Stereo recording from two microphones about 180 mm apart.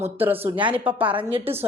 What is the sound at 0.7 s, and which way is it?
Speech, 10° right (ahead or behind).